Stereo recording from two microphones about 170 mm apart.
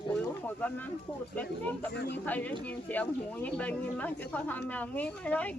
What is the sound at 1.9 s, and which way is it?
Speech, 80° left.